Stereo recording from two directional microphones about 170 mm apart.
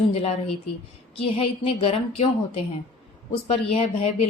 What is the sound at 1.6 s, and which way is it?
Speech, 35° left (ahead or behind).